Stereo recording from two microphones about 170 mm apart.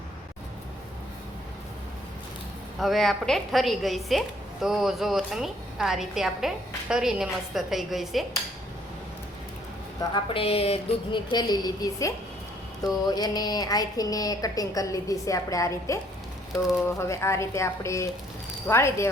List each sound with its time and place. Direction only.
2.7 s a woman's voice: centre (ahead or behind)
10.2 s speech: 35° left (ahead or behind); by 19.0 s 15° left (ahead or behind)